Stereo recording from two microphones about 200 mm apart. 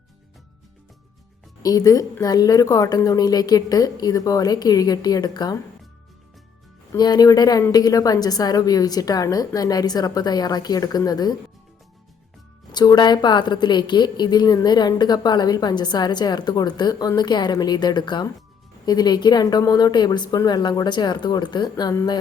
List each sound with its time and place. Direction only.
1.6 s a woman's voice: 20° left (ahead or behind)
6.9 s a woman's voice: 20° left (ahead or behind)
12.7 s a woman's voice: 20° left (ahead or behind)